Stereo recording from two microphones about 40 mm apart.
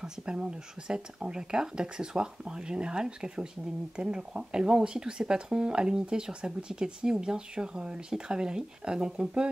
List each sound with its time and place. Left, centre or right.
0.0 s speech: right